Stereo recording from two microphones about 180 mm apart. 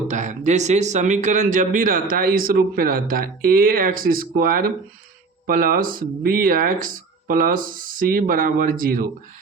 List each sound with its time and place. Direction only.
0.1 s speech: 40° right (ahead or behind)